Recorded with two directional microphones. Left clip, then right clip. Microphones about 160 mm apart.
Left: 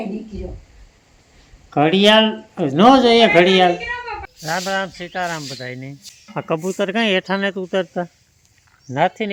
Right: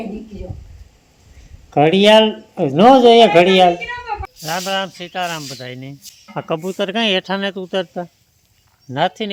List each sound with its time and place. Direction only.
1.7 s a man's voice: 15° right (ahead or behind)
6.3 s speech: centre (ahead or behind)